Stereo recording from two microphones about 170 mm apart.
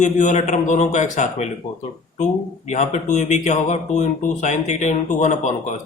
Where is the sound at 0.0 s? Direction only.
45° left (ahead or behind).